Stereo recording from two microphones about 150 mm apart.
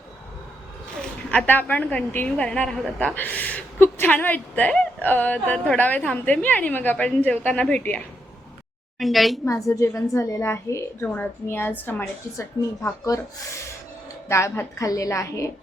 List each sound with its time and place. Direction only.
1.3 s a woman's voice: 10° left (ahead or behind)
9.6 s speech: 20° left (ahead or behind)
14.3 s a woman's voice: 20° left (ahead or behind)